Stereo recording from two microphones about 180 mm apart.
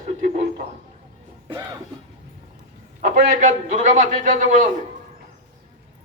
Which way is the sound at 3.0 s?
45° right (ahead or behind).